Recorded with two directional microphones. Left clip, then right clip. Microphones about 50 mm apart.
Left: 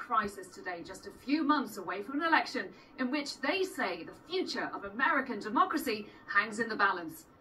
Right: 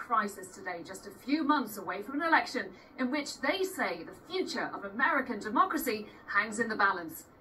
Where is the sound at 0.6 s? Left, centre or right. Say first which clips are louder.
Right 1 dB; left.